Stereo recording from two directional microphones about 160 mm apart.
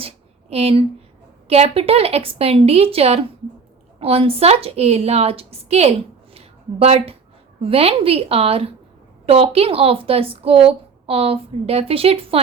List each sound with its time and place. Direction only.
0.5 s speech: 40° right (ahead or behind)
6.3 s a sound: 40° right (ahead or behind)
7.6 s speech: 35° right (ahead or behind)